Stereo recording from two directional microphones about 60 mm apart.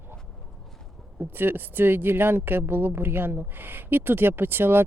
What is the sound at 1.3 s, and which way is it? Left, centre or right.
Speech, right.